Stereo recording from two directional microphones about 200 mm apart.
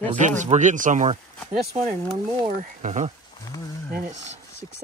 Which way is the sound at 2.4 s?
35° right (ahead or behind).